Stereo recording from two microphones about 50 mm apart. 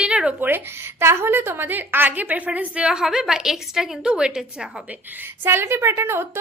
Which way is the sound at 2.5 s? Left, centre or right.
Right.